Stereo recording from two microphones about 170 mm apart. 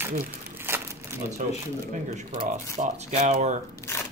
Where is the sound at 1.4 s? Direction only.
50° right (ahead or behind).